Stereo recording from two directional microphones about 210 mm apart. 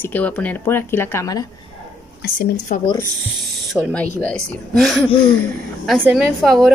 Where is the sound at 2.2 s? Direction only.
45° left (ahead or behind).